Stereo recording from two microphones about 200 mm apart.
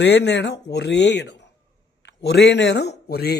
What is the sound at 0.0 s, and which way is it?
Speech, 60° left (ahead or behind).